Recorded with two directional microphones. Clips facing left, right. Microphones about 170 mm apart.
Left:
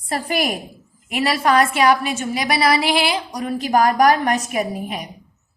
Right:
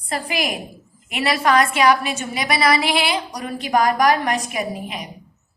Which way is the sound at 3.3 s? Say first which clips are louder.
Left 4 dB; 45° left (ahead or behind).